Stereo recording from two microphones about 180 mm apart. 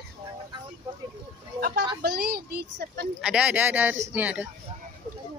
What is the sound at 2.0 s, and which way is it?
A child's voice, 60° right (ahead or behind).